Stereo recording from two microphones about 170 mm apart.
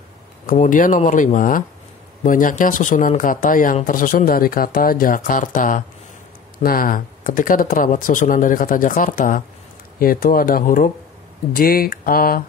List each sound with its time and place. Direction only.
0.5 s speech: 50° left (ahead or behind)